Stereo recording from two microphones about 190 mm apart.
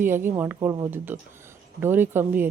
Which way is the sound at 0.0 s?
10° right (ahead or behind).